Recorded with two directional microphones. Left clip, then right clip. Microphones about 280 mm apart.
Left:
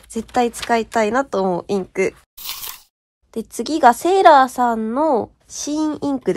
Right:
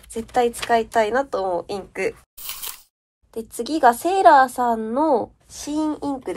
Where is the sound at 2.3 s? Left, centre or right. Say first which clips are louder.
Left 4 dB; centre.